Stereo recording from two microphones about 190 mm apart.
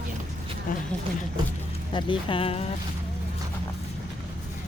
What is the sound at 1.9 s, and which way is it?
Speech, 25° left (ahead or behind).